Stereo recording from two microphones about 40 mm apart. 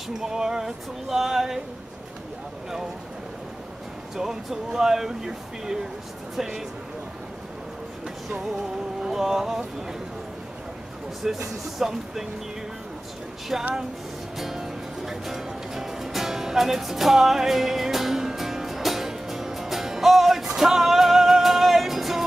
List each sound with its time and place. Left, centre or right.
0.2 s speech: centre
4.2 s speech: centre
9.0 s music: centre
11.2 s speech: centre
13.5 s speech: centre
14.4 s music: centre